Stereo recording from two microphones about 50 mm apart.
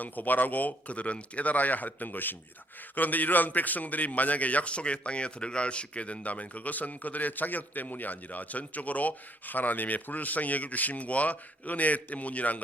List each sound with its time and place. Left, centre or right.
0.0 s a man's voice: left